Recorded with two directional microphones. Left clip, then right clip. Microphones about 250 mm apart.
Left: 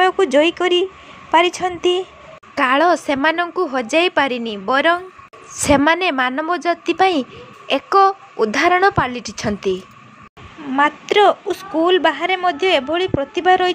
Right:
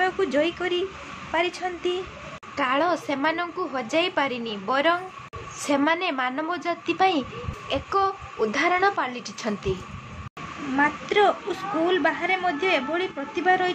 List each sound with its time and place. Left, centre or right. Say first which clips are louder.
0.0 s a woman's voice: left 9 dB; left
10.8 s a woman's voice: left 7 dB; left